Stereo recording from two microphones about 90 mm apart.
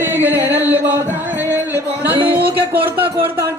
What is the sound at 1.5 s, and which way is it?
Music, 20° right (ahead or behind).